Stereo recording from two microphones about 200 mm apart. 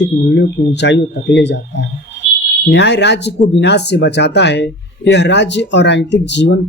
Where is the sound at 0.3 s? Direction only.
60° left (ahead or behind).